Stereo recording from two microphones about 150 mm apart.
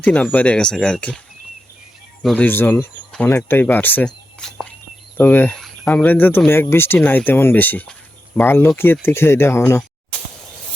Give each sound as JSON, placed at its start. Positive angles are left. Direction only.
{"t": 0.0, "sound": "speech", "side_deg": 10}
{"t": 2.2, "sound": "speech", "side_deg": 10}